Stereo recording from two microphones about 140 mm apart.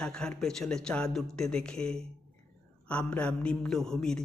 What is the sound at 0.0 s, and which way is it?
Speech, 5° left (ahead or behind).